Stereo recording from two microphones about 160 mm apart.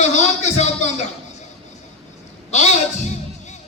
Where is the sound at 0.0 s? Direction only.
45° left (ahead or behind).